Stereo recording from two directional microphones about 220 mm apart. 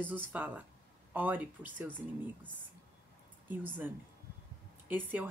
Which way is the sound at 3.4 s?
10° right (ahead or behind).